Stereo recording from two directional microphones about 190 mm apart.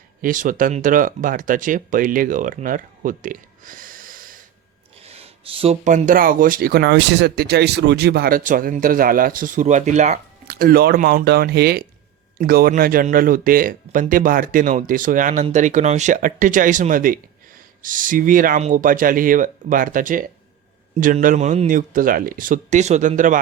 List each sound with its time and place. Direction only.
0.2 s speech: 45° right (ahead or behind)
5.0 s speech: 30° right (ahead or behind)
10.4 s speech: 50° right (ahead or behind)